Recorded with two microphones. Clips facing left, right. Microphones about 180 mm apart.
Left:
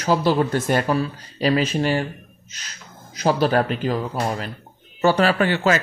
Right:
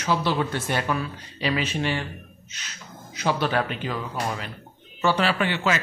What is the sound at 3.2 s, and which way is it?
Speech, 40° left (ahead or behind).